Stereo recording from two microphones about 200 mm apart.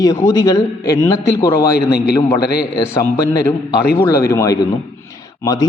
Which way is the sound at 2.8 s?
15° left (ahead or behind).